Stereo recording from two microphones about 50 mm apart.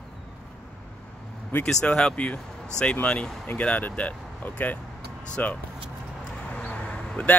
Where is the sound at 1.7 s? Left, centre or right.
Centre.